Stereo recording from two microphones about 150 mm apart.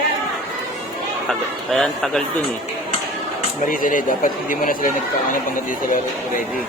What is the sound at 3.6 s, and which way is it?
Speech, 65° left (ahead or behind).